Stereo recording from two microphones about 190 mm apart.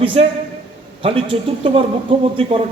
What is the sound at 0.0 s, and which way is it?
A man's voice, 30° right (ahead or behind).